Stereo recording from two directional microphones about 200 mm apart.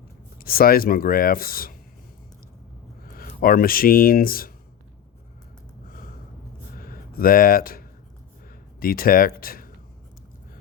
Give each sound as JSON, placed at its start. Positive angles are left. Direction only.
{"t": 0.3, "sound": "speech", "side_deg": 45}
{"t": 3.2, "sound": "speech", "side_deg": 45}
{"t": 6.7, "sound": "a sound", "side_deg": 45}
{"t": 8.8, "sound": "speech", "side_deg": 45}